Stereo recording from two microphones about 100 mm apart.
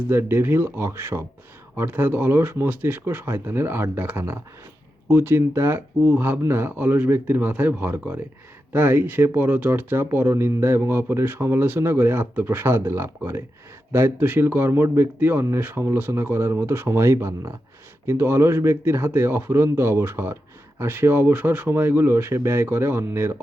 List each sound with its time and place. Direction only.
0.1 s speech: 25° right (ahead or behind)